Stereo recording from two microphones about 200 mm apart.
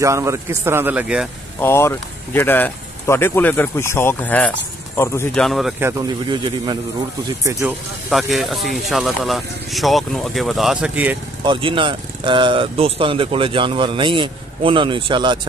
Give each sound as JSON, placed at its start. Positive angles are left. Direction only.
{"t": 0.0, "sound": "speech", "side_deg": -15}
{"t": 1.6, "sound": "speech", "side_deg": 10}
{"t": 5.4, "sound": "speech", "side_deg": 0}
{"t": 6.2, "sound": "speech", "side_deg": -25}
{"t": 8.1, "sound": "speech", "side_deg": 0}
{"t": 11.4, "sound": "speech", "side_deg": -25}